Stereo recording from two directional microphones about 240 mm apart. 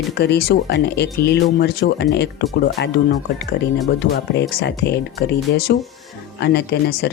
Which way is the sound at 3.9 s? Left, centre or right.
Left.